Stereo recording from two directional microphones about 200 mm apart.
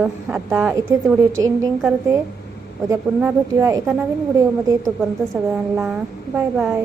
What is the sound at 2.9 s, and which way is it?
A woman's voice, 15° right (ahead or behind).